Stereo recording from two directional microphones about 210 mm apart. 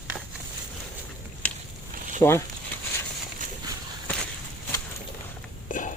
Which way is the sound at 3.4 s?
40° right (ahead or behind).